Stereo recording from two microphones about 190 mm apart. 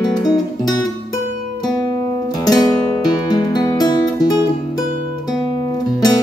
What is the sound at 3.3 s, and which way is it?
Music, 20° left (ahead or behind).